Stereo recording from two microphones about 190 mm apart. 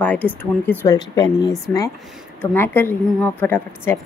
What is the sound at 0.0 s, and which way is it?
Speech, 10° left (ahead or behind).